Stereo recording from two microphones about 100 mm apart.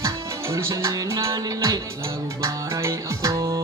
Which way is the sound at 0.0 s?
30° right (ahead or behind).